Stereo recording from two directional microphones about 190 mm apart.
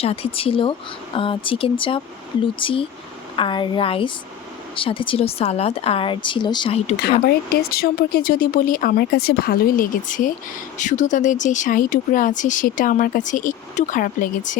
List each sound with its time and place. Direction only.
0.0 s a woman's voice: 30° left (ahead or behind)
7.5 s speech: 55° left (ahead or behind)